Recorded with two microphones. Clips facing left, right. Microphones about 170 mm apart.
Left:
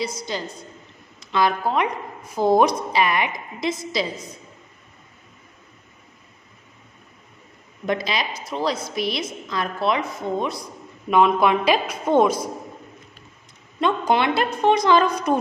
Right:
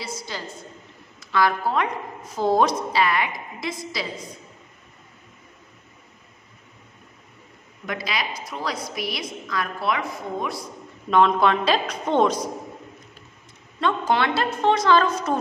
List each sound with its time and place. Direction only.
0.0 s a woman's voice: 20° left (ahead or behind)
7.8 s a woman's voice: 25° left (ahead or behind)
11.1 s a woman's voice: 10° left (ahead or behind)
13.7 s a woman's voice: 15° left (ahead or behind)